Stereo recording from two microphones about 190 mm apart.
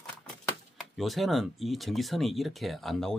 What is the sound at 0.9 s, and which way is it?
Speech, centre (ahead or behind).